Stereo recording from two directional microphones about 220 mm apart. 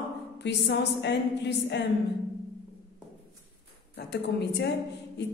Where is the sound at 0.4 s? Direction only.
50° left (ahead or behind).